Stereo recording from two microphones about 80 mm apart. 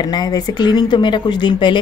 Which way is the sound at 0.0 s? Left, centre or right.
Left.